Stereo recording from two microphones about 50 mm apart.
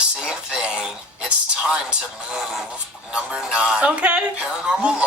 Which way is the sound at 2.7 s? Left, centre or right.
Centre.